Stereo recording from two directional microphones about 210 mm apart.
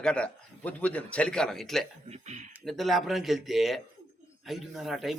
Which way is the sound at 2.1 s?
35° right (ahead or behind).